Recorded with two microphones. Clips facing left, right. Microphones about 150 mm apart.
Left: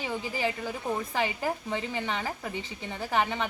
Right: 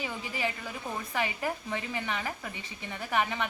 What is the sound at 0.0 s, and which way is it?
A woman's voice, 30° left (ahead or behind).